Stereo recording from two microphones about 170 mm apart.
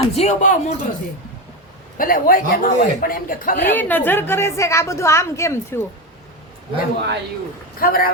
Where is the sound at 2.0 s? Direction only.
55° left (ahead or behind).